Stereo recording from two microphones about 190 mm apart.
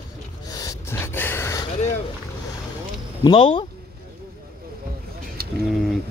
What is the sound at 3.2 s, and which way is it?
Speech, 25° left (ahead or behind).